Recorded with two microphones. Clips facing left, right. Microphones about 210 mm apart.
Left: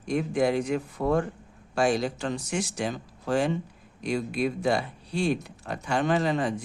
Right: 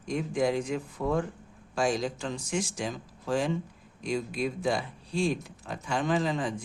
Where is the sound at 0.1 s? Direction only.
65° left (ahead or behind).